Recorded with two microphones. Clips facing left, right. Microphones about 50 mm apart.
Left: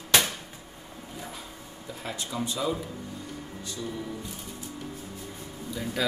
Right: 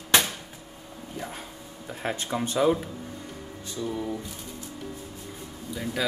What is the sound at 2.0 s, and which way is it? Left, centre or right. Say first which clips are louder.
Speech: right 4 dB; right.